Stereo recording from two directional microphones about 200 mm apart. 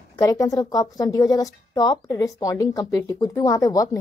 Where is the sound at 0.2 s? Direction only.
15° left (ahead or behind).